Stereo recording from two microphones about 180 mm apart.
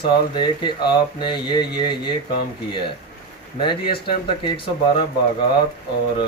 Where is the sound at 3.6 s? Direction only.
25° left (ahead or behind).